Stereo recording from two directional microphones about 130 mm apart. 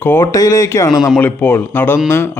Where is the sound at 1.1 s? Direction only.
15° left (ahead or behind).